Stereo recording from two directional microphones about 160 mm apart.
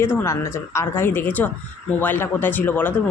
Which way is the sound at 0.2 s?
15° left (ahead or behind).